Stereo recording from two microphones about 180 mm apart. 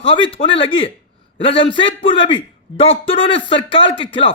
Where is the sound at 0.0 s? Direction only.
30° left (ahead or behind).